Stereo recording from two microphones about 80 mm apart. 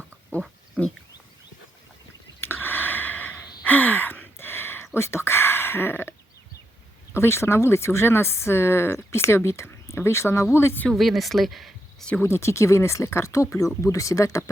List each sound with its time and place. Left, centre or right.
0.8 s pig: centre
2.4 s gasp: left
4.9 s speech: left
7.2 s speech: left
10.8 s speech: centre
12.2 s speech: left